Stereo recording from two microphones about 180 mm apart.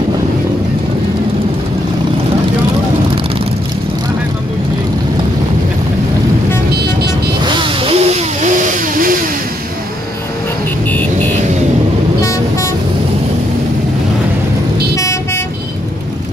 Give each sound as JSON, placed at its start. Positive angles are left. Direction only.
{"t": 7.4, "sound": "vehicle", "side_deg": -25}
{"t": 10.9, "sound": "vehicle", "side_deg": 10}
{"t": 15.0, "sound": "vehicle", "side_deg": 15}